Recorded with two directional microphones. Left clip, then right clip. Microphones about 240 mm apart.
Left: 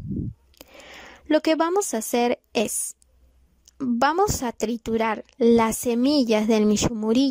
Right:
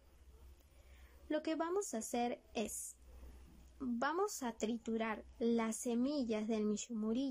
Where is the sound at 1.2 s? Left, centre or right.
Left.